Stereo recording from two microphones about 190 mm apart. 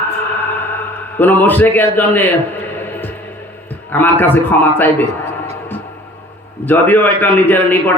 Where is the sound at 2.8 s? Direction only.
10° left (ahead or behind).